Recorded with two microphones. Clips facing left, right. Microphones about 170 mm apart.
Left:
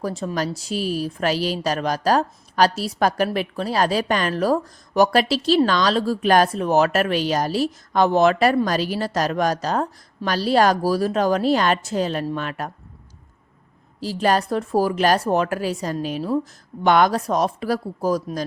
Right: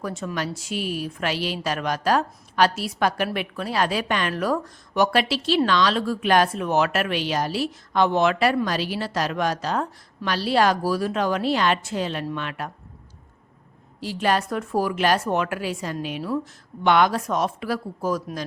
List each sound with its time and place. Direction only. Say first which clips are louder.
0.0 s a woman's voice: left 4 dB; 35° left (ahead or behind)
14.0 s a woman's voice: left 3 dB; 40° left (ahead or behind)